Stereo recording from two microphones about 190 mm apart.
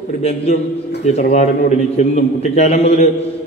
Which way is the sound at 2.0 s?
35° left (ahead or behind).